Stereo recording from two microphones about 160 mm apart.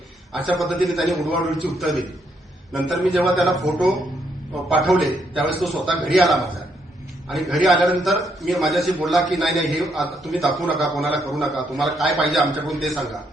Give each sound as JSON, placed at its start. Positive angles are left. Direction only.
{"t": 0.5, "sound": "a man's voice", "side_deg": 0}